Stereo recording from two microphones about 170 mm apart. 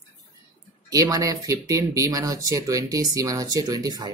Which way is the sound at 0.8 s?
20° right (ahead or behind).